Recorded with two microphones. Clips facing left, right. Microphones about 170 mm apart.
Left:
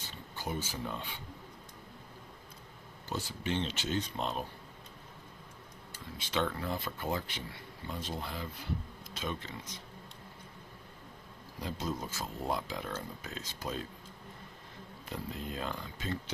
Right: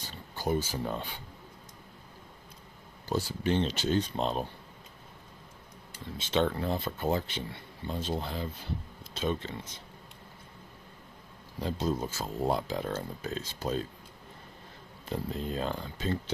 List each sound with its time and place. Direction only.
0.3 s speech: 35° right (ahead or behind)
3.1 s speech: 35° right (ahead or behind)
6.1 s speech: 25° right (ahead or behind)
11.6 s speech: 30° right (ahead or behind)
15.1 s speech: 35° right (ahead or behind)